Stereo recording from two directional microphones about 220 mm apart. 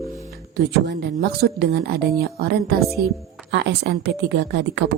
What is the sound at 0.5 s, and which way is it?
A woman's voice, 50° right (ahead or behind).